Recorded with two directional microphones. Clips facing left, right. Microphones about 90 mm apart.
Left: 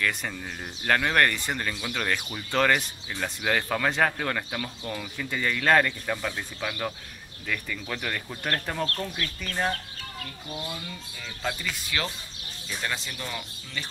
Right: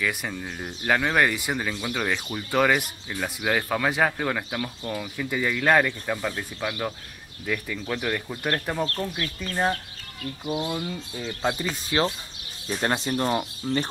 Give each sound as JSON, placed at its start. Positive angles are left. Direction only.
{"t": 0.0, "sound": "speech", "side_deg": -5}
{"t": 9.0, "sound": "speech", "side_deg": -20}
{"t": 10.6, "sound": "speech", "side_deg": -40}
{"t": 12.6, "sound": "speech", "side_deg": -45}